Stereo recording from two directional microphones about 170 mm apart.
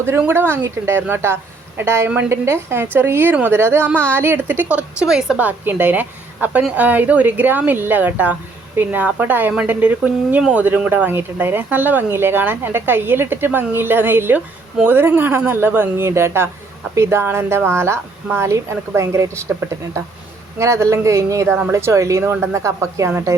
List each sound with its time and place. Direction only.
0.0 s a woman's voice: 15° right (ahead or behind)
20.6 s a woman's voice: 15° right (ahead or behind)